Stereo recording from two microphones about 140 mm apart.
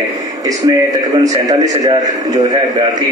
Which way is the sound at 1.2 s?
25° right (ahead or behind).